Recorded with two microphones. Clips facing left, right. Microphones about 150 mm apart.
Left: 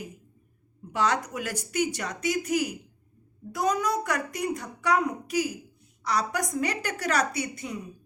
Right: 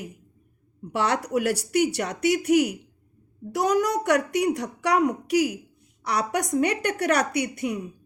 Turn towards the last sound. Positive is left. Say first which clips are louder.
# right 6 dB
turn(degrees=-65)  # may be behind; listen again after turning